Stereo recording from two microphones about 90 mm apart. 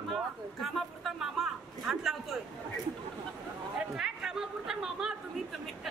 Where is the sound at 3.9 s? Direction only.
5° right (ahead or behind).